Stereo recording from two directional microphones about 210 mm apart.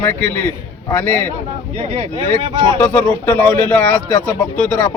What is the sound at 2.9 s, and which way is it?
Speech, 10° left (ahead or behind).